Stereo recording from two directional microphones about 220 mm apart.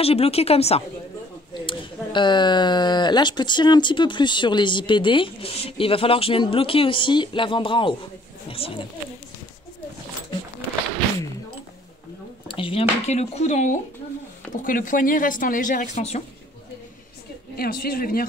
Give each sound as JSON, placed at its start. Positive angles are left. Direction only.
{"t": 0.0, "sound": "speech", "side_deg": 25}
{"t": 12.4, "sound": "speech", "side_deg": 25}
{"t": 17.6, "sound": "speech", "side_deg": 40}